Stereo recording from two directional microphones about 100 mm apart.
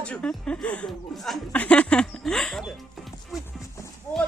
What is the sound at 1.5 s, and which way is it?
Speech, 10° left (ahead or behind).